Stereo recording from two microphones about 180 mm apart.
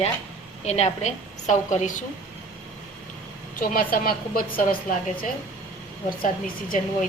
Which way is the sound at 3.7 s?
50° left (ahead or behind).